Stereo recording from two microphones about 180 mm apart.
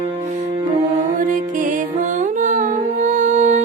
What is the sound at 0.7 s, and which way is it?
Music, 45° right (ahead or behind).